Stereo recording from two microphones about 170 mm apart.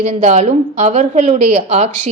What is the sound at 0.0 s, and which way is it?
A woman's voice, 45° right (ahead or behind).